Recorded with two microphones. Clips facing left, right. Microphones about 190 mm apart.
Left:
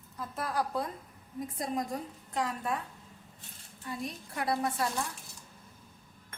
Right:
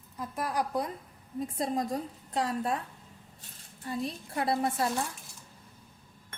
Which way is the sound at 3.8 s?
30° right (ahead or behind).